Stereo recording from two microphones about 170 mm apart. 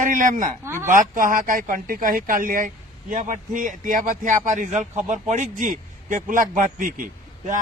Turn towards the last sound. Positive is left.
turn(degrees=-55)  # may be behind; listen again after turning